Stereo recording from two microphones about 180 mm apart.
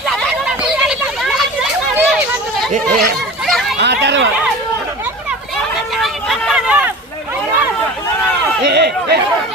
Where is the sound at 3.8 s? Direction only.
70° right (ahead or behind).